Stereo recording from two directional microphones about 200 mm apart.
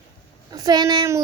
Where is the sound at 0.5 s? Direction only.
20° right (ahead or behind).